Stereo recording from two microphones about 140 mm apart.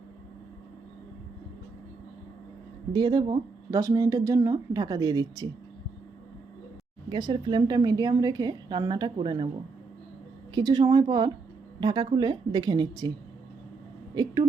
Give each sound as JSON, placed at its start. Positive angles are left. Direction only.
{"t": 2.9, "sound": "speech", "side_deg": -35}
{"t": 7.1, "sound": "a woman's voice", "side_deg": -35}
{"t": 10.5, "sound": "a woman's voice", "side_deg": -30}